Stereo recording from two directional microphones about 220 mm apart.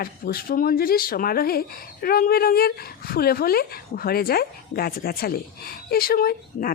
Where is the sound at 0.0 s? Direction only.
40° left (ahead or behind).